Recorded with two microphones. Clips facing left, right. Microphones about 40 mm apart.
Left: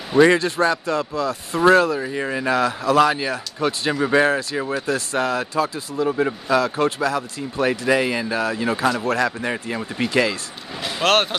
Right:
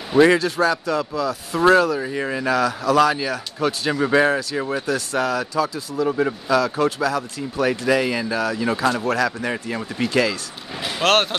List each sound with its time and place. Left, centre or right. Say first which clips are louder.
0.1 s speech: even; centre
2.4 s speech: even; centre
5.4 s speech: even; left
6.0 s speech: even; centre
6.6 s speech: even; centre
10.8 s speech: even; centre